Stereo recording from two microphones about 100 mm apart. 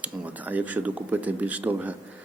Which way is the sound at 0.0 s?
15° right (ahead or behind).